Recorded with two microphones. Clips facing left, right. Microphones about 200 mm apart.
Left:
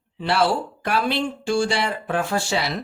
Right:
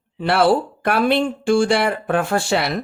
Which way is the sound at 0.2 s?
55° right (ahead or behind).